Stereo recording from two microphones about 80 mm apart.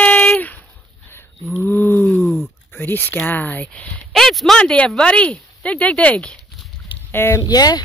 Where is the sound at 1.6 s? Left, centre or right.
Left.